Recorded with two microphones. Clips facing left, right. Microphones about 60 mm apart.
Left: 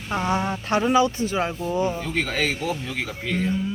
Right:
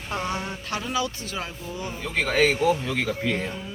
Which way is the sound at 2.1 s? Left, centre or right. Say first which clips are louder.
Right 3 dB; centre.